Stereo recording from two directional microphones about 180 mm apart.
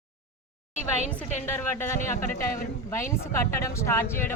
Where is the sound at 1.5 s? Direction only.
15° left (ahead or behind).